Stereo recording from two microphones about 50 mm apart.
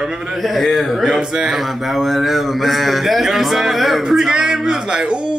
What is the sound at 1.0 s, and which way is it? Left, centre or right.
A man's voice, centre.